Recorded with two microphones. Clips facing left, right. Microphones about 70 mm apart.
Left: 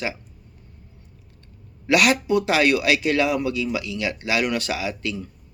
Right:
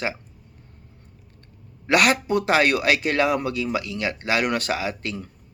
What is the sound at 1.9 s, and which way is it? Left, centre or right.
A man's voice, right.